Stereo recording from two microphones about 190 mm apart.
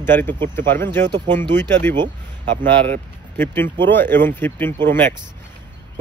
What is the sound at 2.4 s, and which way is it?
Speech, 45° right (ahead or behind).